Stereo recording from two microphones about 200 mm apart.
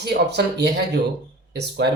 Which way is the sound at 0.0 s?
55° right (ahead or behind).